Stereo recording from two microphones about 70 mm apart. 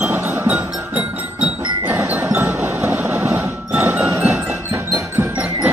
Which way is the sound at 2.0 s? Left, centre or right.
Right.